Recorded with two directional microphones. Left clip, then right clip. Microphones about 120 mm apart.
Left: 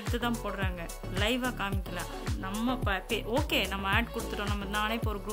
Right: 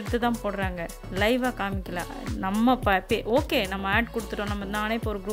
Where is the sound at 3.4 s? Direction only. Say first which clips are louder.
Right 4 dB; 35° right (ahead or behind).